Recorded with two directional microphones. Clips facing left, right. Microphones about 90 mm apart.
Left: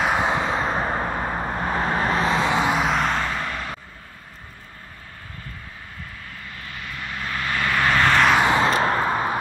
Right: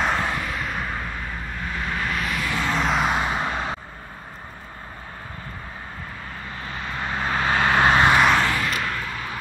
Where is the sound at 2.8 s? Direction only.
5° right (ahead or behind); by 3.8 s 20° right (ahead or behind).